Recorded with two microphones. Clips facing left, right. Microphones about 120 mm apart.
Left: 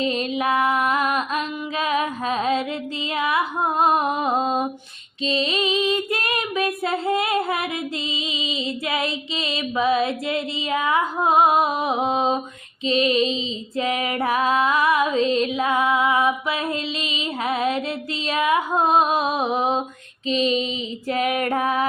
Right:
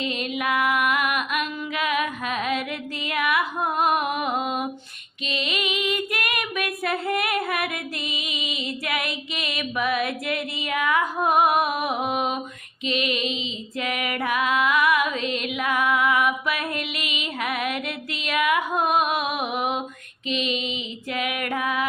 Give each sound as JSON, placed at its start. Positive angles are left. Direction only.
{"t": 0.0, "sound": "music", "side_deg": 35}
{"t": 5.2, "sound": "child singing", "side_deg": 30}
{"t": 8.2, "sound": "female singing", "side_deg": 25}
{"t": 12.8, "sound": "music", "side_deg": 30}
{"t": 13.7, "sound": "female singing", "side_deg": 30}
{"t": 20.2, "sound": "music", "side_deg": 35}